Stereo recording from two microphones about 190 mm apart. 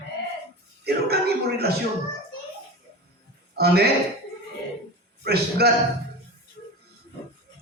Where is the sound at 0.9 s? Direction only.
55° right (ahead or behind).